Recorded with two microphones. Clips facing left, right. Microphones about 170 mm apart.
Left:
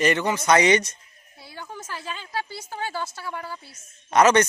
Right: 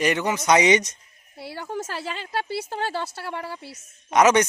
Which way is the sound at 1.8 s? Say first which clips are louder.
Right 4 dB; 85° right.